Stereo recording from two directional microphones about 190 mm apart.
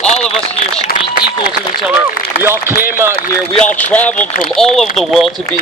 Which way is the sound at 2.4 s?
15° right (ahead or behind).